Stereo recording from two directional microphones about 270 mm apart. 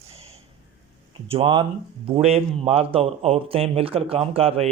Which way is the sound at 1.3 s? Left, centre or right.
Centre.